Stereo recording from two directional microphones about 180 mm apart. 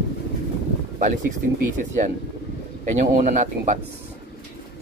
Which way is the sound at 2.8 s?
45° right (ahead or behind).